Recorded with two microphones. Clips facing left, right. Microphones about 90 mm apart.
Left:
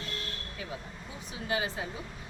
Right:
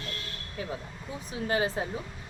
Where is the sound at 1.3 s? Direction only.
40° right (ahead or behind).